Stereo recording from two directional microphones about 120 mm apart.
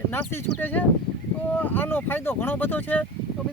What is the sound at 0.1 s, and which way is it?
Speech, 15° left (ahead or behind).